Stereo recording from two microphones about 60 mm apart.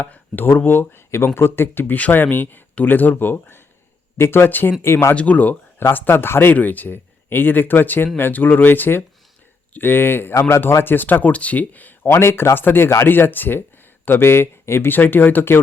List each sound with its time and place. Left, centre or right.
0.0 s speech: left
5.1 s speech: left
5.9 s speech: left
12.0 s speech: left